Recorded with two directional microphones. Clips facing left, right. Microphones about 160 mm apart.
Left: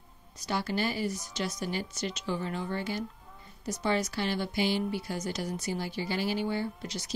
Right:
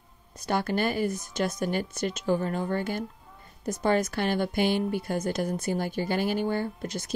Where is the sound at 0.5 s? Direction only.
55° right (ahead or behind).